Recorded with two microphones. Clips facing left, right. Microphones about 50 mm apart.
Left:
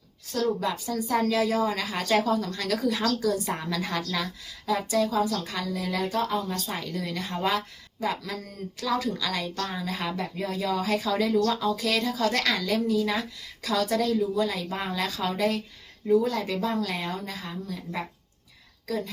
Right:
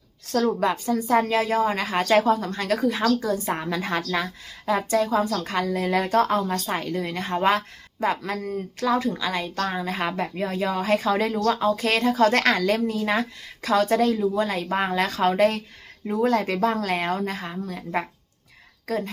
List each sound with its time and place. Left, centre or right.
0.3 s speech: right
0.7 s a woman's voice: right
6.7 s a woman's voice: right